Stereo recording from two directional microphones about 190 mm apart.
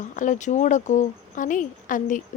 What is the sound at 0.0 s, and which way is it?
Speech, 40° left (ahead or behind).